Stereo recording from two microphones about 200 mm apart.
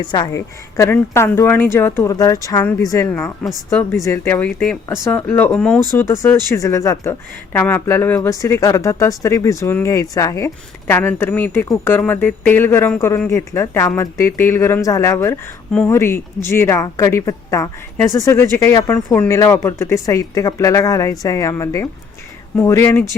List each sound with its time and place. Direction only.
0.0 s speech: 20° left (ahead or behind)